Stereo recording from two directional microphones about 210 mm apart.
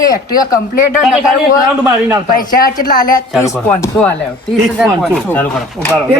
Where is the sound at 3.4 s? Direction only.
15° left (ahead or behind).